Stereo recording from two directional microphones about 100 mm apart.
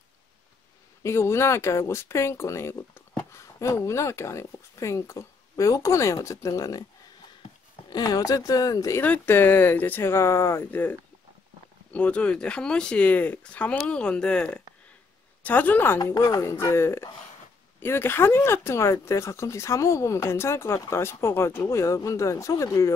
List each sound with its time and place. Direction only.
1.0 s speech: 25° left (ahead or behind)
7.9 s speech: 40° left (ahead or behind)
9.0 s speech: 15° left (ahead or behind); by 22.9 s 30° left (ahead or behind)